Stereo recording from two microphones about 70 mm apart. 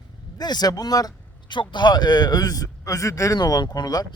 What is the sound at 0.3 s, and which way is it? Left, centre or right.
Speech, left.